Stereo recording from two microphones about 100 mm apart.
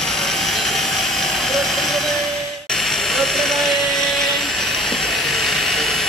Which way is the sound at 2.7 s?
5° left (ahead or behind).